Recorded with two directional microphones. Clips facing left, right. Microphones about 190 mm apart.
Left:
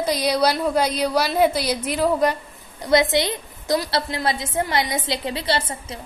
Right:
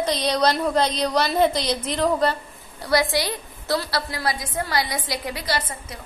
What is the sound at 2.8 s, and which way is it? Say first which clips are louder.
A woman's voice: left 3 dB; 20° left (ahead or behind).